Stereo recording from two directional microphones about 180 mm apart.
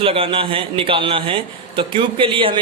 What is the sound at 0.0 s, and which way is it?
A man's voice, 30° right (ahead or behind).